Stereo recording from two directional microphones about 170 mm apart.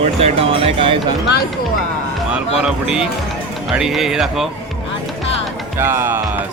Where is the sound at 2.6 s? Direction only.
5° right (ahead or behind).